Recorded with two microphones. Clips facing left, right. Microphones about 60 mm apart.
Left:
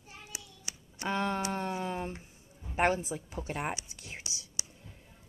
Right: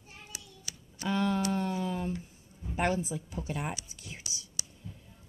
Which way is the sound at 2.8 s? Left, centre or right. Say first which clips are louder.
Left 2 dB; left.